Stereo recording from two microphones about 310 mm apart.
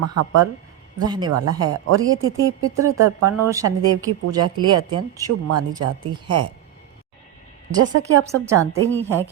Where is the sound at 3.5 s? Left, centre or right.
Centre.